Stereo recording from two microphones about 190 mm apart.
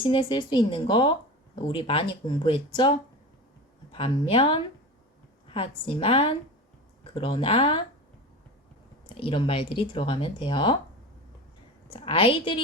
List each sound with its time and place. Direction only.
0.0 s speech: 25° left (ahead or behind)
3.9 s speech: 30° left (ahead or behind)
9.0 s speech: 25° left (ahead or behind)
11.9 s speech: 30° left (ahead or behind)